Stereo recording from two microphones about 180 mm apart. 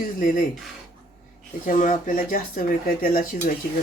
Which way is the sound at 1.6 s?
45° left (ahead or behind).